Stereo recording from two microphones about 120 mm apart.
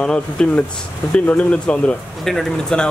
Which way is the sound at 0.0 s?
10° left (ahead or behind).